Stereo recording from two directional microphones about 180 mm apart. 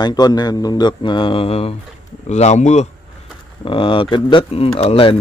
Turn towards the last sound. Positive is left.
turn(degrees=30)  # may be behind; listen again after turning